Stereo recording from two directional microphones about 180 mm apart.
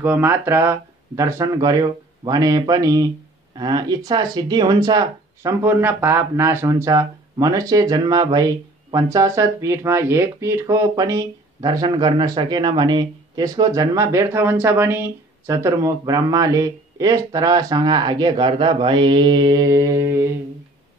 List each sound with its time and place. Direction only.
0.0 s speech: 10° right (ahead or behind)